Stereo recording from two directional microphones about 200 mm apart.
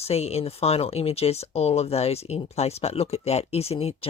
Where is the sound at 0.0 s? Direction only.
30° left (ahead or behind).